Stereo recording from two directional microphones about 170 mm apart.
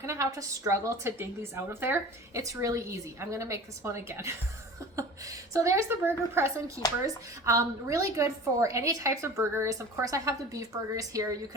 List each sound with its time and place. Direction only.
0.0 s a woman's voice: 15° right (ahead or behind)